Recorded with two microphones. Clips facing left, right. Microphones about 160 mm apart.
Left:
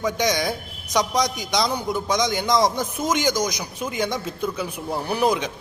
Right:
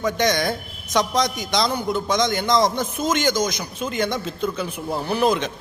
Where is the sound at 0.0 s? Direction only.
Centre (ahead or behind).